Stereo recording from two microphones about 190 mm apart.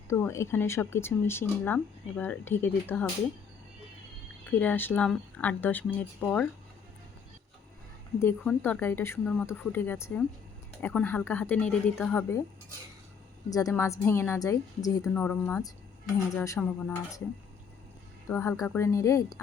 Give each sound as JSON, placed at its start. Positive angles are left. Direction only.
{"t": 0.1, "sound": "speech", "side_deg": 15}
{"t": 4.5, "sound": "speech", "side_deg": 10}
{"t": 8.2, "sound": "speech", "side_deg": 10}
{"t": 13.5, "sound": "speech", "side_deg": 20}
{"t": 15.1, "sound": "speech", "side_deg": 10}
{"t": 18.3, "sound": "speech", "side_deg": 15}